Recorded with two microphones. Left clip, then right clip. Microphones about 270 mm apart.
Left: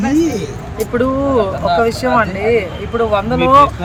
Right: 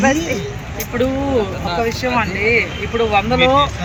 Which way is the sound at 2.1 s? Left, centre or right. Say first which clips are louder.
Left 1 dB; centre.